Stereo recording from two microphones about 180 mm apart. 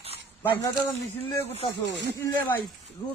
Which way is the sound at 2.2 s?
10° left (ahead or behind).